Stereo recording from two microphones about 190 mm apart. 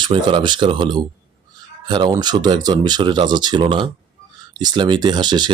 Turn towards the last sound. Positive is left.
turn(degrees=-25)  # may be behind; listen again after turning